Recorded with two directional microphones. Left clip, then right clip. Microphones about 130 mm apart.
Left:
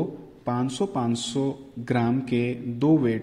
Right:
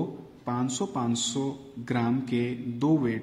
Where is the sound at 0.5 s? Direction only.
20° left (ahead or behind).